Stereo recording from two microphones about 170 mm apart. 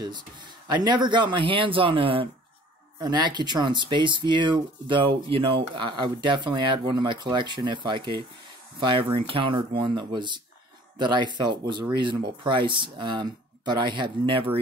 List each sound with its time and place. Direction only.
0.0 s speech: 25° right (ahead or behind)